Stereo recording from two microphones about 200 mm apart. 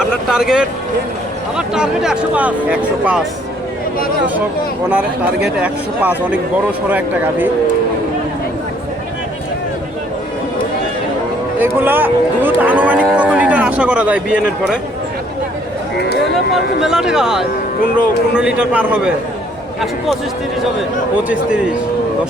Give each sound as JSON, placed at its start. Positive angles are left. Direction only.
{"t": 0.0, "sound": "speech", "side_deg": -5}
{"t": 4.9, "sound": "speech", "side_deg": -5}
{"t": 11.6, "sound": "speech", "side_deg": -10}
{"t": 16.8, "sound": "speech", "side_deg": -5}
{"t": 21.2, "sound": "speech", "side_deg": -5}